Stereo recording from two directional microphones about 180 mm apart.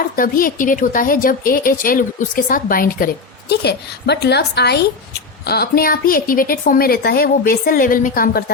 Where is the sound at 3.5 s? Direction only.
65° left (ahead or behind).